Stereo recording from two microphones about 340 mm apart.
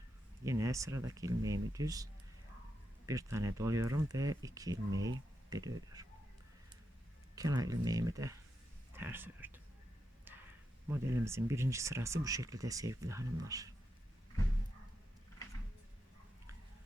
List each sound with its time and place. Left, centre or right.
0.4 s speech: centre
3.1 s speech: centre
7.3 s speech: centre
10.8 s speech: centre